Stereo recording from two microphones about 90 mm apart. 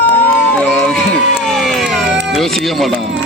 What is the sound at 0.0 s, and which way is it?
Run, 15° left (ahead or behind).